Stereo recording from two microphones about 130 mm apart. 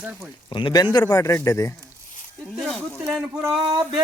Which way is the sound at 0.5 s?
35° left (ahead or behind).